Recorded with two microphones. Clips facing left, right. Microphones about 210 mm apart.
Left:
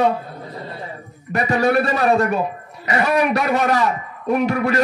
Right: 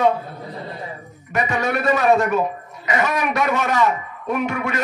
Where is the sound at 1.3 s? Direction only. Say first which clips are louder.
Left 4 dB; 35° left (ahead or behind).